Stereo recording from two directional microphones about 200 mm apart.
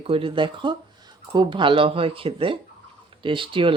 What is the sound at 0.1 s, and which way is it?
Speech, 25° right (ahead or behind).